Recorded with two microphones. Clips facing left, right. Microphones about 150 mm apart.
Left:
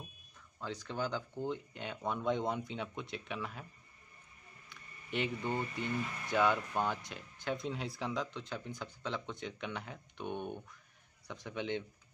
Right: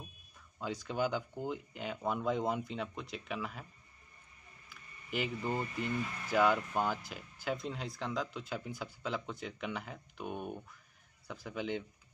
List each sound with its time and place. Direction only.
0.6 s speech: 10° right (ahead or behind)
4.6 s speech: 5° right (ahead or behind)